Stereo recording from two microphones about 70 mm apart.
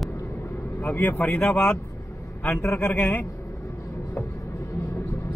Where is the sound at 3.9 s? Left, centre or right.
Left.